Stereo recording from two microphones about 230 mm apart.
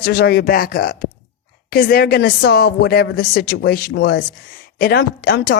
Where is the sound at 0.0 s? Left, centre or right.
Left.